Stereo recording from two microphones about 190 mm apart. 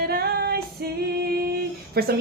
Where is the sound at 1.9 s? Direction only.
55° right (ahead or behind).